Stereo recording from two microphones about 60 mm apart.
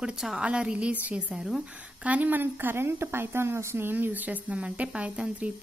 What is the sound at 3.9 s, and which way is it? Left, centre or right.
A woman's voice, right.